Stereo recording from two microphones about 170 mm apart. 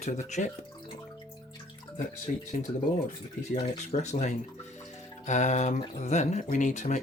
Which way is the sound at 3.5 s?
45° left (ahead or behind).